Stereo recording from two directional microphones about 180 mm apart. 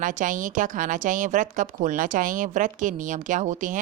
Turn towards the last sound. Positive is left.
turn(degrees=-45)  # may be behind; listen again after turning